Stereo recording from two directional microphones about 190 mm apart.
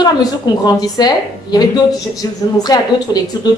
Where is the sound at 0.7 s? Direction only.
20° left (ahead or behind).